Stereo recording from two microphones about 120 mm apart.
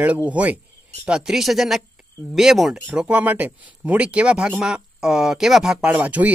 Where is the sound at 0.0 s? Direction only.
10° right (ahead or behind).